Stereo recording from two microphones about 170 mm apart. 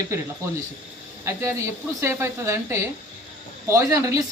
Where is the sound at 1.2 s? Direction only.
15° right (ahead or behind).